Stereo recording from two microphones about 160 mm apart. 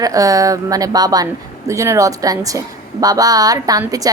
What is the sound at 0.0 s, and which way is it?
A woman's voice, 20° right (ahead or behind).